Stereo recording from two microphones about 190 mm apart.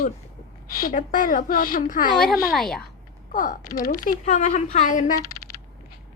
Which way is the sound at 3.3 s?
45° left (ahead or behind).